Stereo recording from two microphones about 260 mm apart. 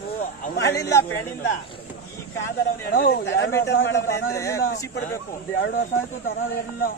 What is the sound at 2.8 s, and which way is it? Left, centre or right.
Speech, left.